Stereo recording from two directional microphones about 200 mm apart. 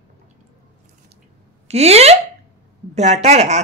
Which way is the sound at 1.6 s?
30° right (ahead or behind).